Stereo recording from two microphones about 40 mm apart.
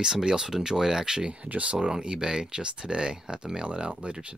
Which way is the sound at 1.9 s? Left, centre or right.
Centre.